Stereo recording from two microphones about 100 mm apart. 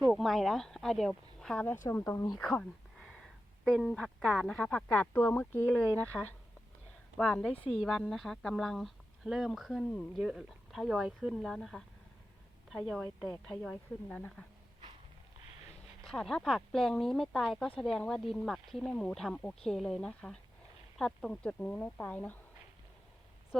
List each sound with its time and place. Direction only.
0.0 s speech: centre (ahead or behind)
1.6 s speech: 20° left (ahead or behind)
2.0 s a woman's voice: 35° left (ahead or behind)
2.4 s speech: 10° left (ahead or behind)
3.0 s a sound: 5° right (ahead or behind)
3.9 s a woman's voice: 5° left (ahead or behind)
12.9 s a woman's voice: 5° left (ahead or behind)
16.0 s a woman's voice: 5° left (ahead or behind)